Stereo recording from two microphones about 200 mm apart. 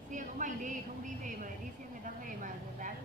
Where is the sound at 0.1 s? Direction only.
40° right (ahead or behind).